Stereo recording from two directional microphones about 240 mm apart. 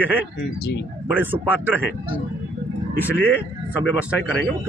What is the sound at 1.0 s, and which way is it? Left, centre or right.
Speech, centre.